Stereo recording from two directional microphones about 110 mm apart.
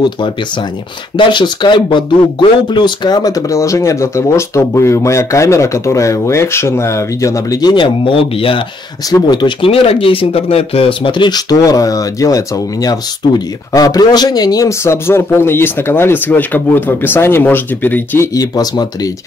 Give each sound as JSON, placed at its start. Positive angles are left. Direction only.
{"t": 1.1, "sound": "speech", "side_deg": 45}
{"t": 7.7, "sound": "speech", "side_deg": 50}
{"t": 9.1, "sound": "speech", "side_deg": 40}
{"t": 9.7, "sound": "speech", "side_deg": 60}
{"t": 18.3, "sound": "speech", "side_deg": 35}